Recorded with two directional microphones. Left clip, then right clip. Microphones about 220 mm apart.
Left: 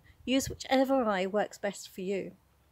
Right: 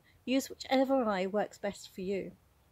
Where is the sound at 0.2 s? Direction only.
5° left (ahead or behind).